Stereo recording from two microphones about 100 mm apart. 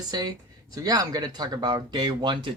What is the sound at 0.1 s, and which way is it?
Speech, 45° right (ahead or behind).